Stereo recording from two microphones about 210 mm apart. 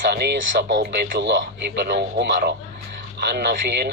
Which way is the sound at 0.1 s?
55° right (ahead or behind).